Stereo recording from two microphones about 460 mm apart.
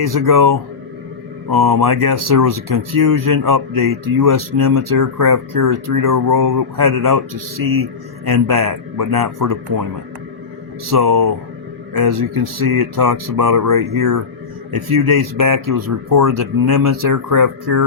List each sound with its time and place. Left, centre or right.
0.0 s speech: right
10.8 s speech: right
12.5 s speech: right